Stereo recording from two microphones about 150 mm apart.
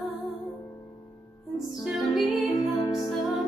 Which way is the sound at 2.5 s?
25° left (ahead or behind).